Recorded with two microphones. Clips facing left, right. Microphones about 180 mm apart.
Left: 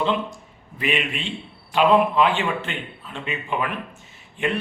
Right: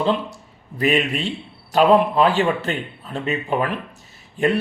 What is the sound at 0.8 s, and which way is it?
A man's voice, 40° right (ahead or behind).